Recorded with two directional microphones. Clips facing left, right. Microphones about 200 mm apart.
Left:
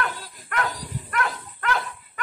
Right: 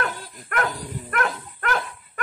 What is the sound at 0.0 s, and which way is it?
Dog, 50° right (ahead or behind).